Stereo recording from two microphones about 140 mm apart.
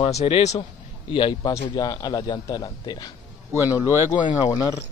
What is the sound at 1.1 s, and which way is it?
A man's voice, 35° left (ahead or behind).